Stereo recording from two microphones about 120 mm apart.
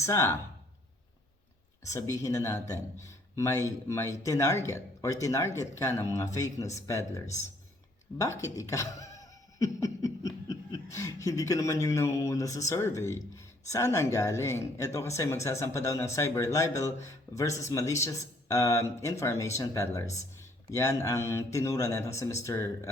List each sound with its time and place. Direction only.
0.0 s speech: 25° left (ahead or behind)
1.8 s speech: 25° left (ahead or behind)
8.2 s speech: 25° left (ahead or behind)